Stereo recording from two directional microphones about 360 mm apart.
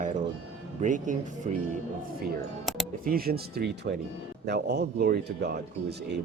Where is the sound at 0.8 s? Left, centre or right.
Right.